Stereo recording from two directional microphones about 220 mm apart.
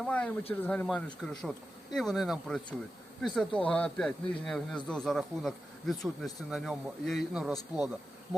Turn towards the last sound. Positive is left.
turn(degrees=-5)  # may be behind; listen again after turning